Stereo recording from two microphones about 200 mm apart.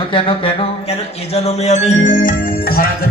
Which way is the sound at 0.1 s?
25° left (ahead or behind).